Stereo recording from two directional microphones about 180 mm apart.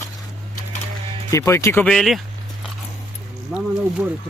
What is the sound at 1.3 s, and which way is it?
Speech, 15° left (ahead or behind).